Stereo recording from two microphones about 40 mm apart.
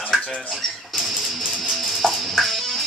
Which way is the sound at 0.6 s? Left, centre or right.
Centre.